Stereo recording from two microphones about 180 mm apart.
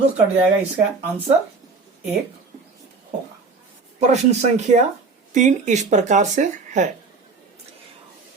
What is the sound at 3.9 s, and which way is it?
Speech, 40° right (ahead or behind).